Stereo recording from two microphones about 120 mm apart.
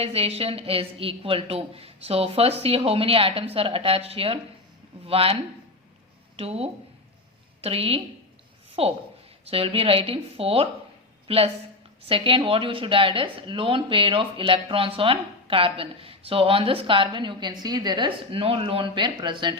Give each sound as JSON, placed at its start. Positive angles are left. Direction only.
{"t": 0.0, "sound": "a woman's voice", "side_deg": -55}
{"t": 12.0, "sound": "speech", "side_deg": -50}